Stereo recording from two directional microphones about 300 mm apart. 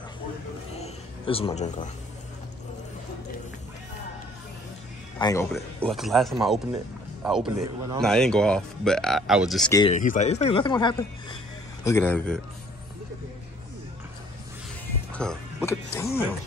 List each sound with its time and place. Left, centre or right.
0.7 s a sound: centre
5.2 s speech: centre
9.8 s speech: left; by 12.4 s centre
15.1 s speech: centre